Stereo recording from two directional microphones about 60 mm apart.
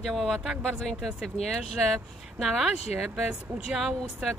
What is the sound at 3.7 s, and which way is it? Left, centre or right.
Speech, centre.